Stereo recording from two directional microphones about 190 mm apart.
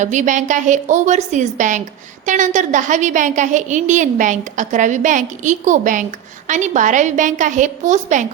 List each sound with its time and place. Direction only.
0.0 s a woman's voice: 40° right (ahead or behind)